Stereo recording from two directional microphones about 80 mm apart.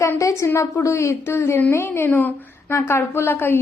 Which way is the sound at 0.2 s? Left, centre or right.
Left.